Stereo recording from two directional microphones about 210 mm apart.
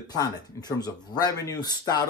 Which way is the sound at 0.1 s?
20° left (ahead or behind).